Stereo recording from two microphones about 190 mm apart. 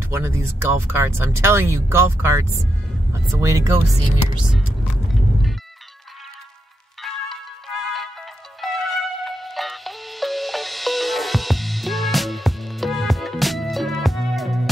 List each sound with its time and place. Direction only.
0.1 s speech: 15° right (ahead or behind)
7.0 s music: centre (ahead or behind)